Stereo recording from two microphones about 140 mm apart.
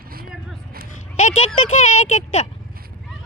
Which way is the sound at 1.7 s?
55° left (ahead or behind).